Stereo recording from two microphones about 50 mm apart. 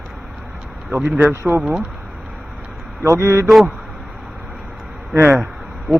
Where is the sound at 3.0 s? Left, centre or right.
Right.